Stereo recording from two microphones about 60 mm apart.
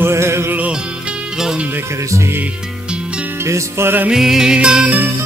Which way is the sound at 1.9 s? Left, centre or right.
Right.